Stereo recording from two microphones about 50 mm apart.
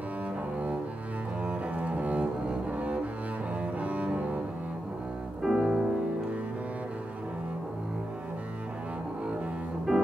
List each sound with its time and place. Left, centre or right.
1.4 s cello: right
5.4 s music: centre
9.9 s music: centre